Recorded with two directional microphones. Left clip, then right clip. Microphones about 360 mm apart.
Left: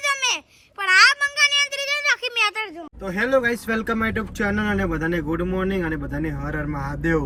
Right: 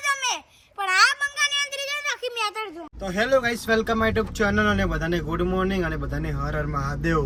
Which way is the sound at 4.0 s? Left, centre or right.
Right.